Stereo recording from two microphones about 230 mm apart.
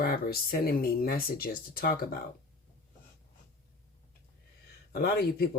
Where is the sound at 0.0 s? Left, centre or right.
Left.